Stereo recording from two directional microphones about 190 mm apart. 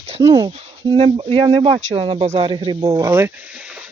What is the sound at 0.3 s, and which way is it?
Speech, 20° right (ahead or behind).